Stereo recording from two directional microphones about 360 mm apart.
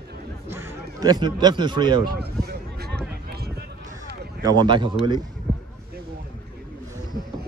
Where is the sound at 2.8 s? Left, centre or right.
Right.